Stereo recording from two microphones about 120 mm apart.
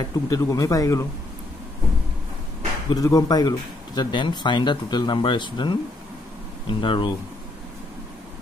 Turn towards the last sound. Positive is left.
turn(degrees=40)  # may be behind; listen again after turning